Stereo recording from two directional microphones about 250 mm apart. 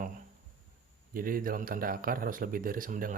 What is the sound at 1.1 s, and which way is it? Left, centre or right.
Speech, right.